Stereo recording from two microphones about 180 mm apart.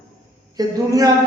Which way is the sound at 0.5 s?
20° right (ahead or behind).